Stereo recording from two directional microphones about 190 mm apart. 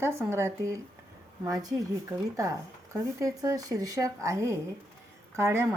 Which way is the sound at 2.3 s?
15° right (ahead or behind).